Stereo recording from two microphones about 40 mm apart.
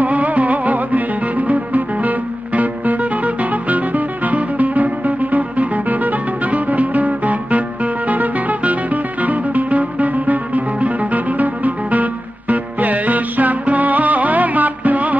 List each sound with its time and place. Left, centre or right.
0.0 s music: right